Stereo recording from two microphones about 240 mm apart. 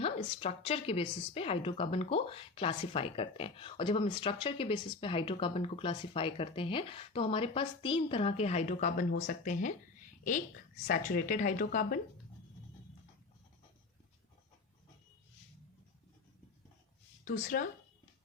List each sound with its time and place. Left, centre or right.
0.0 s a woman's voice: left
10.8 s speech: left
17.2 s speech: left